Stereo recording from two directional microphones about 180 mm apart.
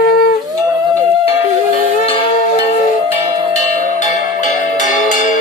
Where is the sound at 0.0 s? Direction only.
55° left (ahead or behind).